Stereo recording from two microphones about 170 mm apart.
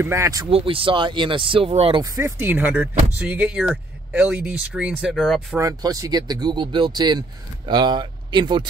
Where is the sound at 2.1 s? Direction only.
15° right (ahead or behind).